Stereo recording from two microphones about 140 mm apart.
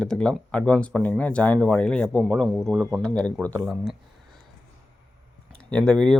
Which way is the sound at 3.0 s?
10° left (ahead or behind).